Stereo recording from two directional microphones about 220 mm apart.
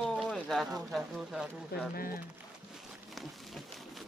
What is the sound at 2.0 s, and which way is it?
Speech, 40° left (ahead or behind).